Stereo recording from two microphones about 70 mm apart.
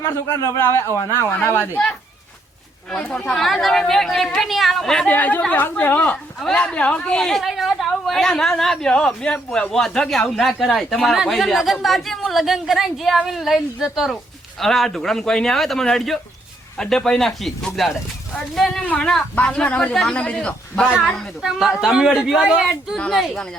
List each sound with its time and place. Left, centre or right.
0.0 s a man's voice: left
0.7 s a man's voice: left
3.1 s a woman's voice: centre
5.0 s speech: left
6.4 s a woman's voice: centre
14.6 s a woman's voice: centre
18.8 s a woman's voice: centre
21.4 s a woman's voice: centre